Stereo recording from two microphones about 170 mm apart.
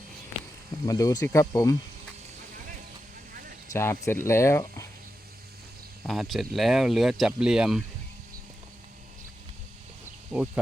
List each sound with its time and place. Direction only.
0.9 s speech: 20° left (ahead or behind)
3.7 s speech: 15° left (ahead or behind)
6.0 s speech: centre (ahead or behind)
10.3 s speech: 5° right (ahead or behind)